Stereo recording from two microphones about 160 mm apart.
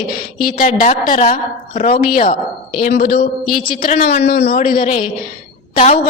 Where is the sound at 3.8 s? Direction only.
60° left (ahead or behind).